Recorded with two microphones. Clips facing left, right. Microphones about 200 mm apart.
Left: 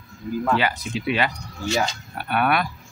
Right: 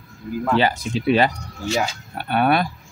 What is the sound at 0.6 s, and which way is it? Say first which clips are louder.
Speech: right 5 dB; 35° right (ahead or behind).